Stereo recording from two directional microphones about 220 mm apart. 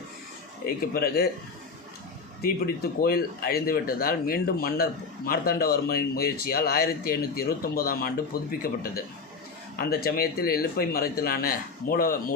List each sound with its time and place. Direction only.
0.6 s speech: 45° left (ahead or behind)
2.4 s speech: 45° left (ahead or behind)